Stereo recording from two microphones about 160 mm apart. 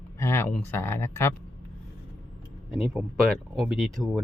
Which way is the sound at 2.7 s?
Centre (ahead or behind).